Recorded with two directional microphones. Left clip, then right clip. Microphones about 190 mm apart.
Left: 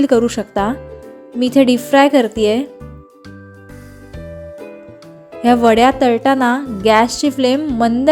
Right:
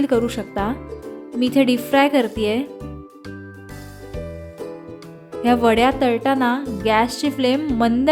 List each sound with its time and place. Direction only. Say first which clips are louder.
0.0 s speech: left 6 dB; 20° left (ahead or behind)
5.4 s speech: left 5 dB; 15° left (ahead or behind)